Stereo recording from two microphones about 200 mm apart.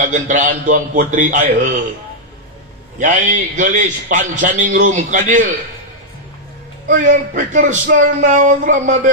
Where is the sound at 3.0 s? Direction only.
40° right (ahead or behind).